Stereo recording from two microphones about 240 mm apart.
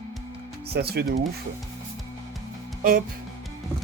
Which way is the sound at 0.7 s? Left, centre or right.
Right.